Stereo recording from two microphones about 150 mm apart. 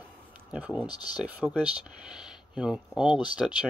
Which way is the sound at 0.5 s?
10° right (ahead or behind).